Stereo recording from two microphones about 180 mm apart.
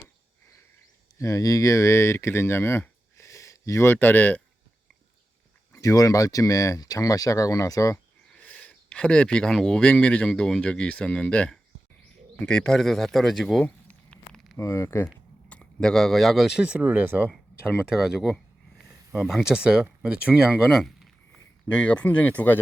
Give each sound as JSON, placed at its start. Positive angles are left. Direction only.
{"t": 1.2, "sound": "speech", "side_deg": 15}
{"t": 5.7, "sound": "speech", "side_deg": 20}
{"t": 14.6, "sound": "speech", "side_deg": 15}